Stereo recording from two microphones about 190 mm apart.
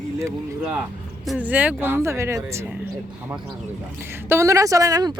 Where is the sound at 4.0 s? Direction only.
10° right (ahead or behind).